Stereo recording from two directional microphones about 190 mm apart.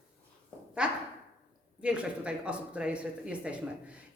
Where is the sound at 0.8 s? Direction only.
5° right (ahead or behind).